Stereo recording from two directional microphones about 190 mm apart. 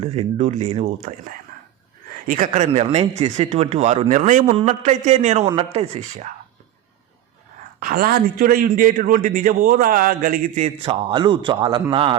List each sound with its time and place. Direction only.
0.0 s speech: 35° right (ahead or behind)
2.2 s speech: 45° right (ahead or behind)
7.8 s a man's voice: 50° right (ahead or behind)
10.8 s speech: 25° right (ahead or behind)